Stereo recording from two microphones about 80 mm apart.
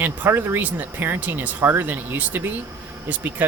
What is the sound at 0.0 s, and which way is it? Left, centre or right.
Speech, right.